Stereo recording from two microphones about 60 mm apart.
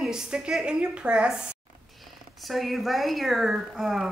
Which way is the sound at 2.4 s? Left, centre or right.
Centre.